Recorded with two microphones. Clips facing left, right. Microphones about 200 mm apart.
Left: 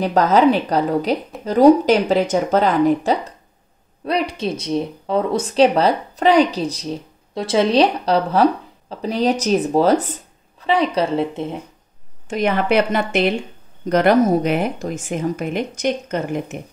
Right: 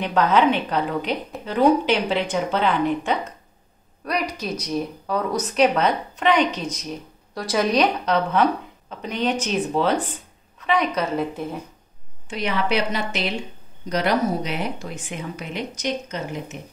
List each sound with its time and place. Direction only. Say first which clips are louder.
0.0 s speech: left 4 dB; 40° left (ahead or behind)
12.3 s speech: left 6 dB; 50° left (ahead or behind)